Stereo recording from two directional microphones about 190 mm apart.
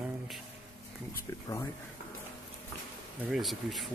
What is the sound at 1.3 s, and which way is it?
Speech, 20° left (ahead or behind).